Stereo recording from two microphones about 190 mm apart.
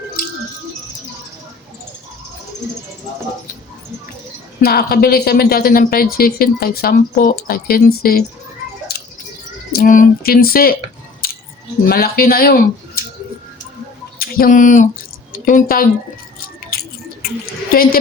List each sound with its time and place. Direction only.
4.6 s a woman's voice: 55° left (ahead or behind)
9.7 s a woman's voice: 45° left (ahead or behind)
11.2 s scissors: 50° left (ahead or behind)
11.9 s speech: 50° left (ahead or behind)
14.2 s a woman's voice: 50° left (ahead or behind)
17.2 s a sound: 50° left (ahead or behind)